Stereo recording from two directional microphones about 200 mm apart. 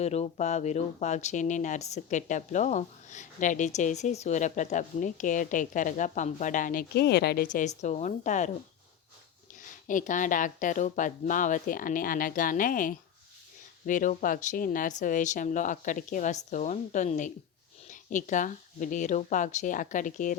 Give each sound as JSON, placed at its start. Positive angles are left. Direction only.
{"t": 0.0, "sound": "speech", "side_deg": 35}
{"t": 9.8, "sound": "speech", "side_deg": 40}